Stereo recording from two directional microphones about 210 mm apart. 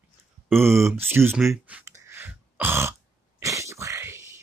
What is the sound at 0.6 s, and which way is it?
Speech, 15° right (ahead or behind).